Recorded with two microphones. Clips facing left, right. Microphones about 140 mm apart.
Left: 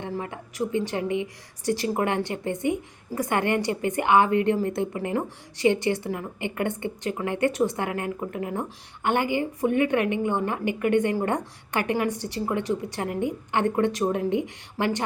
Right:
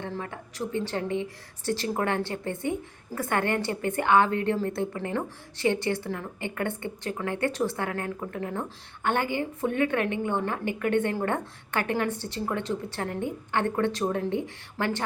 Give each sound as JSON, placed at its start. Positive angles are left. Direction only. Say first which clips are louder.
{"t": 0.0, "sound": "a woman's voice", "louder": "left 3 dB", "side_deg": 15}